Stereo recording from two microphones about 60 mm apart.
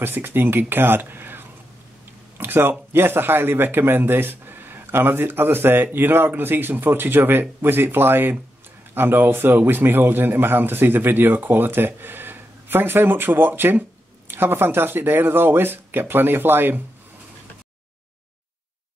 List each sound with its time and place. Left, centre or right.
0.0 s a man's voice: right